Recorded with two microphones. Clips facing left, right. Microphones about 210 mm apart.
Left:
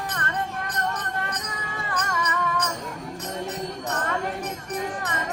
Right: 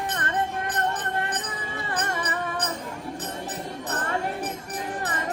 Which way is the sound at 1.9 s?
30° right (ahead or behind).